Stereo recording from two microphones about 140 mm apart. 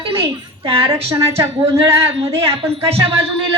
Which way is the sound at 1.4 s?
20° right (ahead or behind).